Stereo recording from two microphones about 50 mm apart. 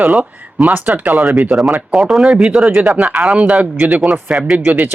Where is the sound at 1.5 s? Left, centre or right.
Centre.